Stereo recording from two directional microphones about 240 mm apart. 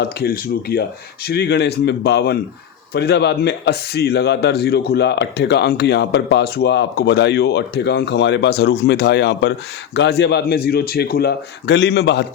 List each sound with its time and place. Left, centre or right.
0.0 s a man's voice: left